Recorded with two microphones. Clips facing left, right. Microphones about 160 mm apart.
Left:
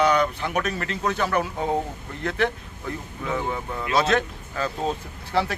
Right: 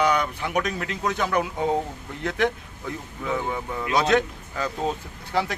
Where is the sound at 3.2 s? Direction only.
Centre (ahead or behind).